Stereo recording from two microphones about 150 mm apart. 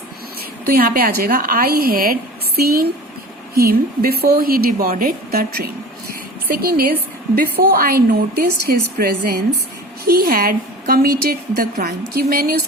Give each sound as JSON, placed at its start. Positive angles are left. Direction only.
{"t": 0.7, "sound": "a woman's voice", "side_deg": -80}
{"t": 6.5, "sound": "a woman's voice", "side_deg": -85}
{"t": 10.1, "sound": "a woman's voice", "side_deg": -75}
{"t": 12.1, "sound": "a woman's voice", "side_deg": -90}